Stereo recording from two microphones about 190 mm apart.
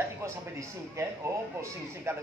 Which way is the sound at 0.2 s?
15° right (ahead or behind).